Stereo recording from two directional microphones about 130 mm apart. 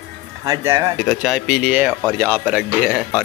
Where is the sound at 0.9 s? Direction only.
Centre (ahead or behind).